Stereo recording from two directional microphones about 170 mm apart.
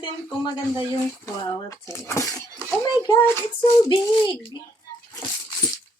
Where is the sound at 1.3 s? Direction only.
20° left (ahead or behind).